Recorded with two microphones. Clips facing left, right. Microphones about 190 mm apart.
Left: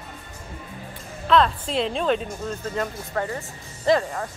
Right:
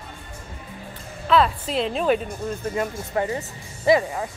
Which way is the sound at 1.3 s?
5° right (ahead or behind).